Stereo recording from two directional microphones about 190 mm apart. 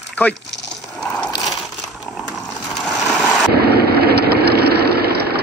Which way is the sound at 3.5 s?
55° right (ahead or behind).